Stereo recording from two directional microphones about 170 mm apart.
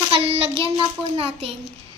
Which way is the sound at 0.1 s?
35° right (ahead or behind).